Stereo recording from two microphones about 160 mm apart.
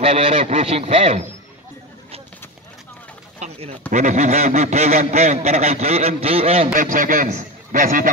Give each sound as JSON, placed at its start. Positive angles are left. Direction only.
{"t": 0.0, "sound": "speech", "side_deg": -45}
{"t": 3.3, "sound": "speech", "side_deg": -40}
{"t": 6.7, "sound": "a man's voice", "side_deg": -60}